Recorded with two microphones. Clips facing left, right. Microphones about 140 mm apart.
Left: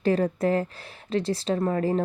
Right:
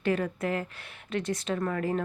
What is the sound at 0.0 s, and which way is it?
Speech, 35° left (ahead or behind).